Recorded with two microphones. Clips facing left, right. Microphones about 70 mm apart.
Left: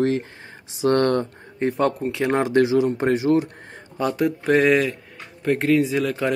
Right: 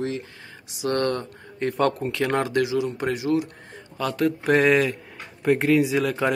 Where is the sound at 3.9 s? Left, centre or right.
Centre.